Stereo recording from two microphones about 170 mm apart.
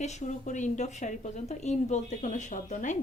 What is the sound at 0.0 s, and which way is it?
A woman's voice, 45° left (ahead or behind).